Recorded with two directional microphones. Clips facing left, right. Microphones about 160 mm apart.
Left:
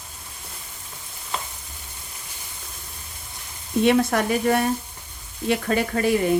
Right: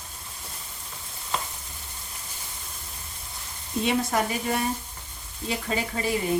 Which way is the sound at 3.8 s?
65° left (ahead or behind).